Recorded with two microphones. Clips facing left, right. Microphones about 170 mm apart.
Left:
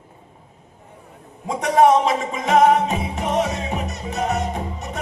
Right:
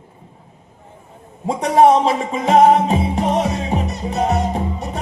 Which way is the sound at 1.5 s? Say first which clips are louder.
Right 3 dB; 30° right (ahead or behind).